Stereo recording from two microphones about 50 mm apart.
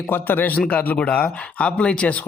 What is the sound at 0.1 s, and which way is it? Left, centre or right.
Speech, left.